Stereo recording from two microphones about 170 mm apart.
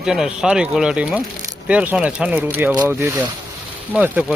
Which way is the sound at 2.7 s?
20° right (ahead or behind).